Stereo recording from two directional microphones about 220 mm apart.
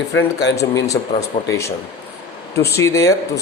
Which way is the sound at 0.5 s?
15° left (ahead or behind).